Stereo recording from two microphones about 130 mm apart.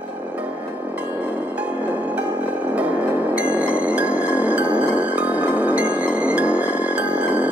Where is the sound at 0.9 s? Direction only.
10° right (ahead or behind).